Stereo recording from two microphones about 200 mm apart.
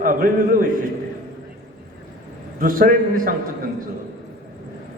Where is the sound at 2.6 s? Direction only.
45° right (ahead or behind).